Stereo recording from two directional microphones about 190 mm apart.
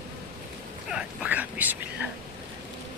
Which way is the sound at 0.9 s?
5° right (ahead or behind).